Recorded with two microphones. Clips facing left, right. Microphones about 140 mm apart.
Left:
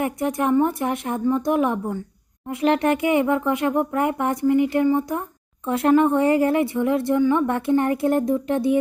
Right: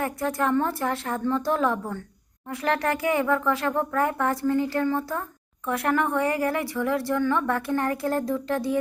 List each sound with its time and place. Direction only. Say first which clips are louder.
0.0 s speech: left 3 dB; 20° left (ahead or behind)